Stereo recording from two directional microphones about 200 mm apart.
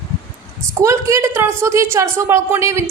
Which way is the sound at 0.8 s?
15° right (ahead or behind).